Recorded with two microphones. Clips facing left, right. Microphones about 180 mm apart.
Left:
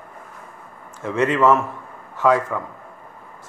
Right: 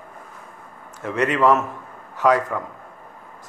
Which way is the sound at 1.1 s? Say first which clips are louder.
Left 1 dB; 15° right (ahead or behind).